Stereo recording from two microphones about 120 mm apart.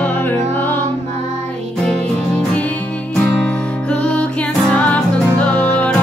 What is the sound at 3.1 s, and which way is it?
Music, 5° left (ahead or behind).